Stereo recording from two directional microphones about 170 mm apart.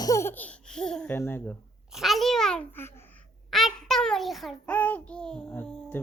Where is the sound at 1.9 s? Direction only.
Centre (ahead or behind).